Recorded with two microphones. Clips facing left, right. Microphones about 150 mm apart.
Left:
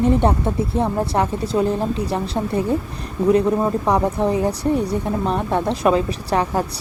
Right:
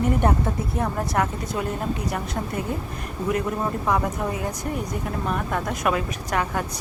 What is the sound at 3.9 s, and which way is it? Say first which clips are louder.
Speech: left 6 dB; 30° left (ahead or behind).